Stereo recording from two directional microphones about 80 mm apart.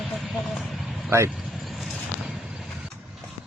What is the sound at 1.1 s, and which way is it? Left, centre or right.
Speech, right.